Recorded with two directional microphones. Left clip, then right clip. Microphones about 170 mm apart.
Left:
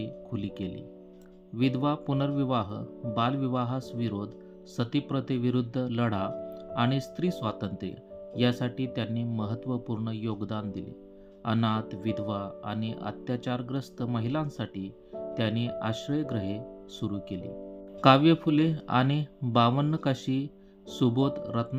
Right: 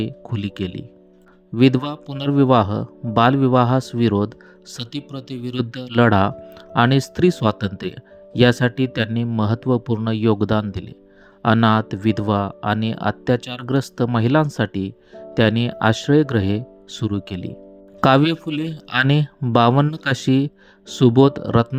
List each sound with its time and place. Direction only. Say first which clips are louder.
0.0 s speech: right 9 dB; 50° right (ahead or behind)
18.4 s speech: even; centre (ahead or behind)
18.7 s speech: right 8 dB; 50° right (ahead or behind)